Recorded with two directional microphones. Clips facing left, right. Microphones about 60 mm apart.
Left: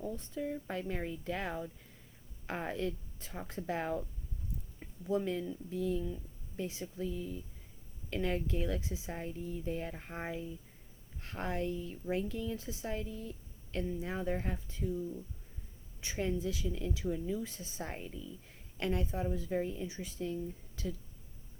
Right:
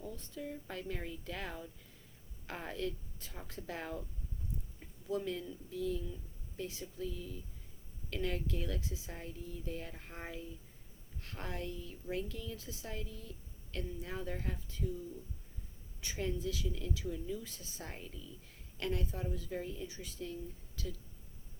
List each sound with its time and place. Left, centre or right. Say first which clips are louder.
0.3 s a woman's voice: left 5 dB; left
5.0 s a woman's voice: left 4 dB; left
16.0 s a woman's voice: left 3 dB; left